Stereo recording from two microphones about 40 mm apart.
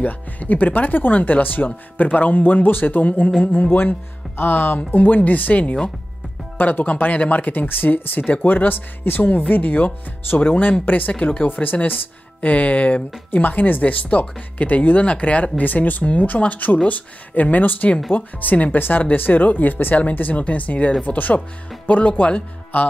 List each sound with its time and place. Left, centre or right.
0.0 s speech: left
4.4 s speech: left
9.4 s speech: left
11.4 s speech: left